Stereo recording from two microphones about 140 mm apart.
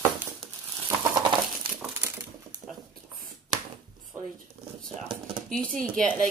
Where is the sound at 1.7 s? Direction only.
5° right (ahead or behind).